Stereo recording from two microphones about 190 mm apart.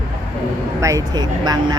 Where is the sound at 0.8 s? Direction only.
15° right (ahead or behind).